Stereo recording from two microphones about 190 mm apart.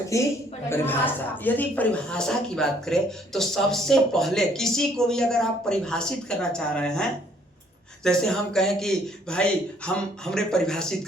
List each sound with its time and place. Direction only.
0.1 s a woman's voice: 15° left (ahead or behind)